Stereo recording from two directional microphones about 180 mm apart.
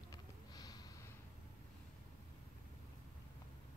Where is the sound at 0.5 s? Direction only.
20° left (ahead or behind).